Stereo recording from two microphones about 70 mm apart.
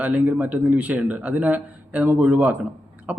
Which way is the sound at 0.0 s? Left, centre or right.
Right.